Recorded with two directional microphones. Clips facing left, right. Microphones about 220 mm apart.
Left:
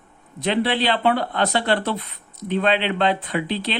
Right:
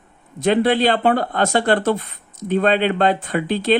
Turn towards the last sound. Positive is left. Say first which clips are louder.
# right 5 dB
turn(degrees=-45)  # may be behind; listen again after turning